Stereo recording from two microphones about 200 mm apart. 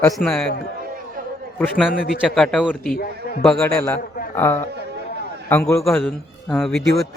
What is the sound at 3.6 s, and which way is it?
A man's voice, 10° left (ahead or behind).